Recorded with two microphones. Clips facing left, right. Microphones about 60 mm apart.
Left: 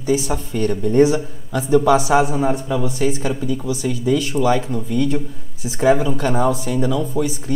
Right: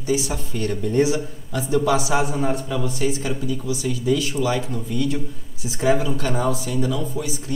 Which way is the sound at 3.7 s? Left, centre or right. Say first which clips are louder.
Left 2 dB; left.